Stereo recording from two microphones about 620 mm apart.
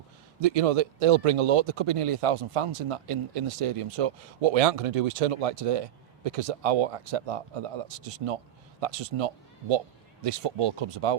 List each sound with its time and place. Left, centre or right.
0.3 s a man's voice: right